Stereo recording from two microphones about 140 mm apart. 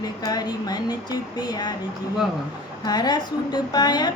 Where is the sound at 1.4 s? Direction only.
30° left (ahead or behind).